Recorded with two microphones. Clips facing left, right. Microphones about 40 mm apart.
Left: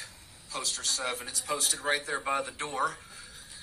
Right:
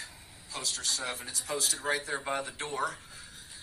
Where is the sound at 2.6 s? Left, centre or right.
Left.